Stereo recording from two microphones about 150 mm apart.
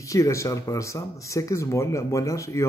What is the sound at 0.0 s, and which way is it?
A man's voice, 20° left (ahead or behind).